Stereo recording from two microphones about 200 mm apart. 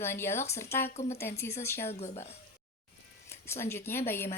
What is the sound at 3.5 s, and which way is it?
Speech, 15° left (ahead or behind).